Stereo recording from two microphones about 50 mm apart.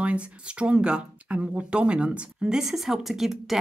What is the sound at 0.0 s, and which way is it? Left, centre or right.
A woman's voice, right.